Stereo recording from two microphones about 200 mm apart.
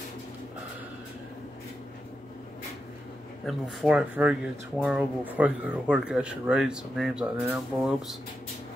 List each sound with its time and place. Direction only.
3.4 s speech: 5° right (ahead or behind)